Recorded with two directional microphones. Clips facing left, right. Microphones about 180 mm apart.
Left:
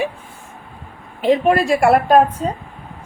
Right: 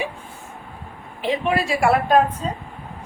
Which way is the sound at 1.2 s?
45° left (ahead or behind).